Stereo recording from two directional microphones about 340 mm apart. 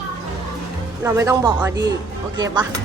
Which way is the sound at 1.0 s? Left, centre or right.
Centre.